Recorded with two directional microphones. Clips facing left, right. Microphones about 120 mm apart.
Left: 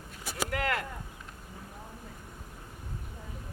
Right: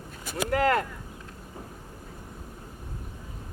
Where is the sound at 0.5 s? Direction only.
35° right (ahead or behind).